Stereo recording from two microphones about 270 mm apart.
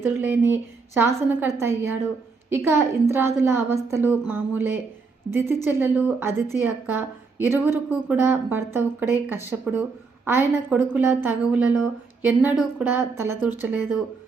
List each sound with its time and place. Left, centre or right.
0.0 s a woman's voice: centre